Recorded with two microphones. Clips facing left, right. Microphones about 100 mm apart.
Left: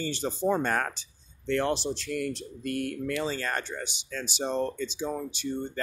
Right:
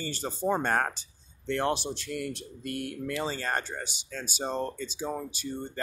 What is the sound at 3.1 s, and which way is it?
Speech, 30° right (ahead or behind).